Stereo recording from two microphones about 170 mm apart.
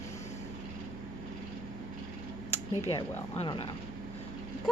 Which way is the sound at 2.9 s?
30° left (ahead or behind).